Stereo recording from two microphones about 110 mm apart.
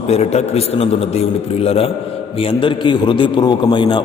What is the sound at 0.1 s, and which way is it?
A man's voice, 75° left (ahead or behind).